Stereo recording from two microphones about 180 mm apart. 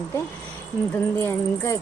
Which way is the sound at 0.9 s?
15° left (ahead or behind).